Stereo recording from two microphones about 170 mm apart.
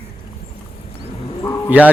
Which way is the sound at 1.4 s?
20° left (ahead or behind).